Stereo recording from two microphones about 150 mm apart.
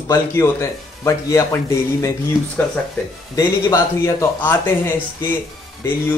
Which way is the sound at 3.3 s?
20° left (ahead or behind).